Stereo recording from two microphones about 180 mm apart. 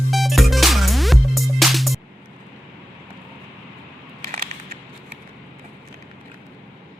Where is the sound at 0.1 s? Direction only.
Centre (ahead or behind).